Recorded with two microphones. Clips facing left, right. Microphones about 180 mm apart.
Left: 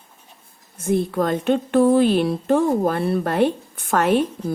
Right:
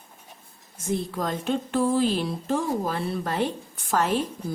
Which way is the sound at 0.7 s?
60° left (ahead or behind).